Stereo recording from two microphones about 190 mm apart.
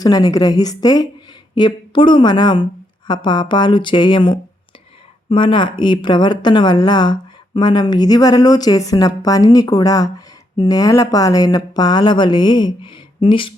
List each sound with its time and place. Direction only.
0.0 s speech: 20° left (ahead or behind)